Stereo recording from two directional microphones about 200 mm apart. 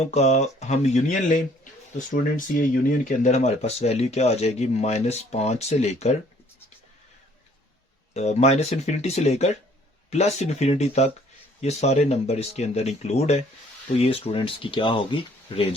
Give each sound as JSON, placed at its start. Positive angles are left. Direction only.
{"t": 0.0, "sound": "speech", "side_deg": 35}
{"t": 8.1, "sound": "speech", "side_deg": 35}